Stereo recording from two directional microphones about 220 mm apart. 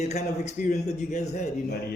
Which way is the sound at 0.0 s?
30° left (ahead or behind).